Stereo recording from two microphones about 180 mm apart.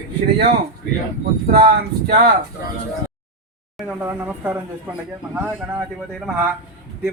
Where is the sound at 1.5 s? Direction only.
55° right (ahead or behind).